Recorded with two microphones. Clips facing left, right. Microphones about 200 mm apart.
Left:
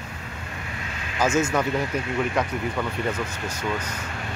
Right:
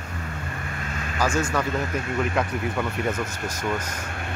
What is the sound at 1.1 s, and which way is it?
Speech, 20° left (ahead or behind).